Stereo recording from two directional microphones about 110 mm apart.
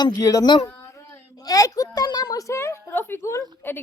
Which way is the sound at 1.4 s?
35° left (ahead or behind).